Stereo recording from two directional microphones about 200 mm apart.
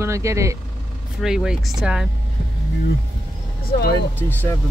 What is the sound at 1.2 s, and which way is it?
Speech, 5° right (ahead or behind).